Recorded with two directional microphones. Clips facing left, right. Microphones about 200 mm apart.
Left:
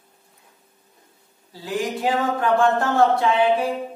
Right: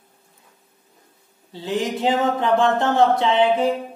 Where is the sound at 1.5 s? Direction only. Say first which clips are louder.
Right 2 dB; 20° right (ahead or behind).